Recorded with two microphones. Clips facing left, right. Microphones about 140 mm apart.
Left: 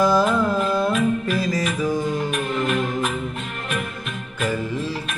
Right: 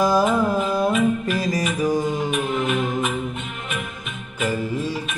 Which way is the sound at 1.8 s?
45° right (ahead or behind).